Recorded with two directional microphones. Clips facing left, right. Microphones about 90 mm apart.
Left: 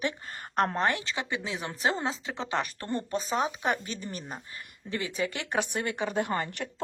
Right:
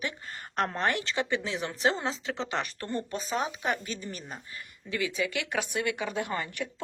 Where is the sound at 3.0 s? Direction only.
35° left (ahead or behind).